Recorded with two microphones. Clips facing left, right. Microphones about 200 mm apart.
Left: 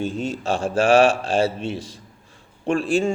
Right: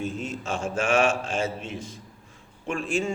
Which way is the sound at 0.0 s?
30° left (ahead or behind).